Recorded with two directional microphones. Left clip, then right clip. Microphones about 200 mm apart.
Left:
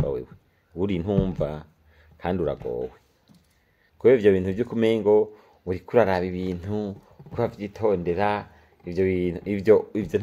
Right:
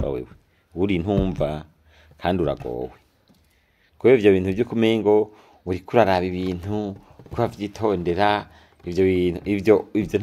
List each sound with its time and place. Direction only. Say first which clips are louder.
0.0 s a sound: right 1 dB; 30° right (ahead or behind)
0.7 s speech: right 3 dB; 30° right (ahead or behind)
4.0 s speech: right 2 dB; 30° right (ahead or behind)